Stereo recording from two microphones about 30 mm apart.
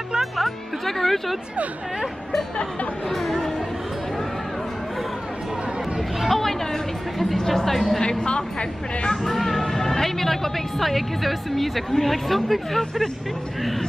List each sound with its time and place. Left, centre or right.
0.8 s speech: centre
3.1 s a woman's voice: centre
6.2 s speech: centre
8.0 s a woman's voice: left
9.1 s a woman's voice: centre